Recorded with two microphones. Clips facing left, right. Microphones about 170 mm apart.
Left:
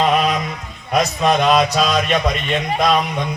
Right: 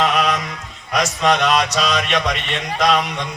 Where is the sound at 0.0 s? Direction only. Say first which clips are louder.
Left 2 dB; 80° right.